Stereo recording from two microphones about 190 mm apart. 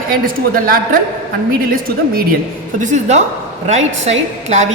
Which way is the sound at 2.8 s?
40° right (ahead or behind).